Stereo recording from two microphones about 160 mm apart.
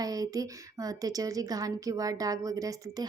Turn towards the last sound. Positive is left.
turn(degrees=-20)  # may be behind; listen again after turning